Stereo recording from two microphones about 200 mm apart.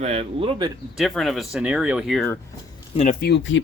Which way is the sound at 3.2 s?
60° left (ahead or behind).